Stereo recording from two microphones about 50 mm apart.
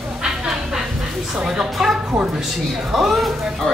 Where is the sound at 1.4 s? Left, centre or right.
Centre.